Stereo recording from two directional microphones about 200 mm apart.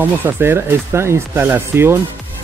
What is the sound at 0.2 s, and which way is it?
Speech, 10° right (ahead or behind).